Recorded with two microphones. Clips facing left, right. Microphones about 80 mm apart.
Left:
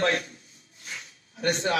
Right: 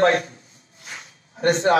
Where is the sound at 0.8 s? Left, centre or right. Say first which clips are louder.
Right 2 dB; right.